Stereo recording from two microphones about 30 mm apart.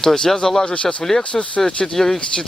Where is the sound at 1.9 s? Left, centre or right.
Centre.